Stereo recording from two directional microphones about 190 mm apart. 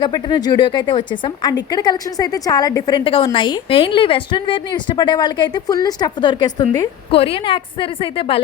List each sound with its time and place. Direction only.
0.0 s a woman's voice: 25° left (ahead or behind)